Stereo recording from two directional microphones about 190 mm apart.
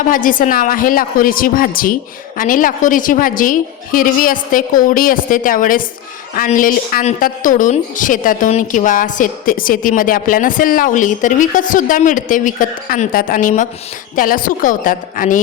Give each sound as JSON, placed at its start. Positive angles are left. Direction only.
{"t": 0.1, "sound": "a woman's voice", "side_deg": 45}